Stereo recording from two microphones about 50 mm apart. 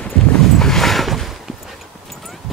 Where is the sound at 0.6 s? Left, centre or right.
Centre.